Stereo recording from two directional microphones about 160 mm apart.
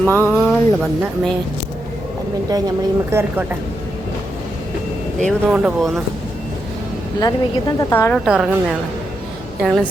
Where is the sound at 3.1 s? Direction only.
15° right (ahead or behind).